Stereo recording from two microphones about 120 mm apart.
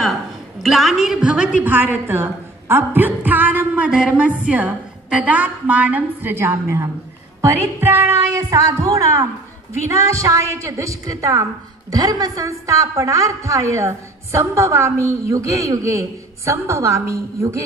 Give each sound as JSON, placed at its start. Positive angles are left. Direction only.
{"t": 0.6, "sound": "a woman's voice", "side_deg": 0}